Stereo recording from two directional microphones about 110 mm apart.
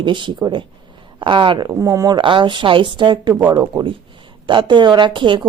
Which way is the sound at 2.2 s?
50° right (ahead or behind).